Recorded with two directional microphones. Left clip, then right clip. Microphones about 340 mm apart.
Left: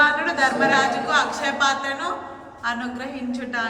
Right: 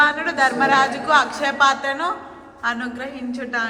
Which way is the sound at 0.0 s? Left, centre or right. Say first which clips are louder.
Right 1 dB; centre.